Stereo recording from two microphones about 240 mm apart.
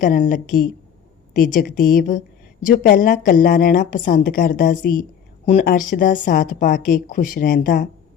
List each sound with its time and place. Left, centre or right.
0.0 s a woman's voice: left